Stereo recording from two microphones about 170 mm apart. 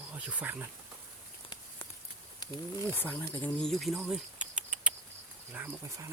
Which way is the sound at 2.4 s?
25° left (ahead or behind).